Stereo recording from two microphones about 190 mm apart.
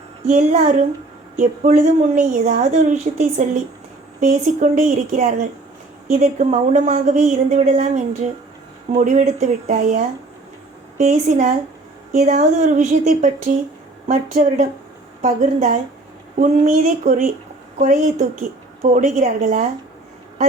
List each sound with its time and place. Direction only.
0.3 s a woman's voice: 40° right (ahead or behind)